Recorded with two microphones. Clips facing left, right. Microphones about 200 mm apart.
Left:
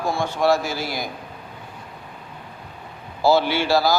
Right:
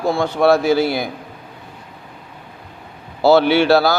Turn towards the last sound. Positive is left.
turn(degrees=-65)  # may be behind; listen again after turning